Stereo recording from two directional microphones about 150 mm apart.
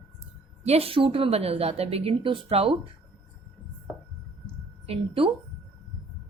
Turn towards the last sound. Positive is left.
turn(degrees=-40)  # may be behind; listen again after turning